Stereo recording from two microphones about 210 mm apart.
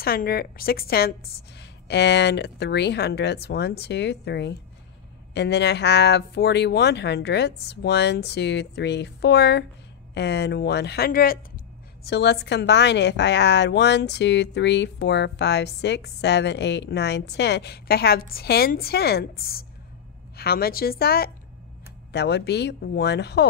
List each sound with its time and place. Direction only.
0.0 s speech: 45° left (ahead or behind)
12.1 s a woman's voice: 55° left (ahead or behind)